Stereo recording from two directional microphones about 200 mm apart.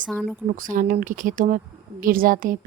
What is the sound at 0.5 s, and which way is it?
A woman's voice, 40° right (ahead or behind).